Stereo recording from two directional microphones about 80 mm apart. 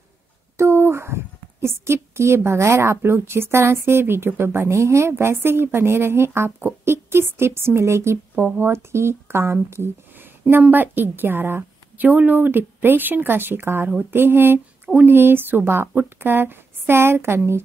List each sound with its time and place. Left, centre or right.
0.6 s a woman's voice: right